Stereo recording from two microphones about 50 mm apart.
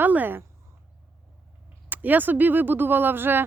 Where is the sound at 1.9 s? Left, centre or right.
Right.